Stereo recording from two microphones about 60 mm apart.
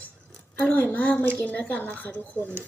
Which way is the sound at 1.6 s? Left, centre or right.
Left.